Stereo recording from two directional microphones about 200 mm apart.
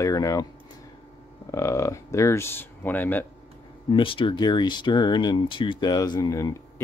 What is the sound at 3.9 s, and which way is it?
Speech, 25° left (ahead or behind).